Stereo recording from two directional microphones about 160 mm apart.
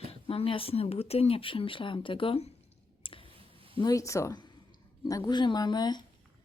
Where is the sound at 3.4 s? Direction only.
35° right (ahead or behind).